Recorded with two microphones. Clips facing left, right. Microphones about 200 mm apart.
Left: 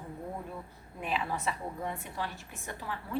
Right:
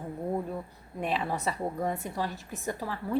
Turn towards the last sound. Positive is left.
turn(degrees=-40)  # may be behind; listen again after turning